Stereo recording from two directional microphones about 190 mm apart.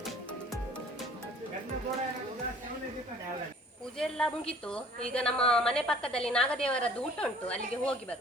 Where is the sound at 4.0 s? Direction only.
5° left (ahead or behind).